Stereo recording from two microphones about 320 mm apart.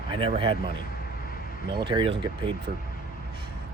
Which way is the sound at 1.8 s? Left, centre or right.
Centre.